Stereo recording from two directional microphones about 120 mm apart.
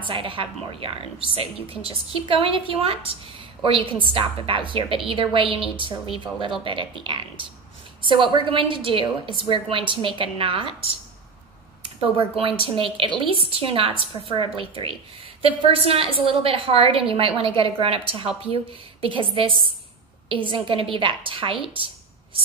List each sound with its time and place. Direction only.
0.1 s a woman's voice: 50° right (ahead or behind)
12.4 s a woman's voice: 50° right (ahead or behind)
20.5 s a woman's voice: 45° right (ahead or behind)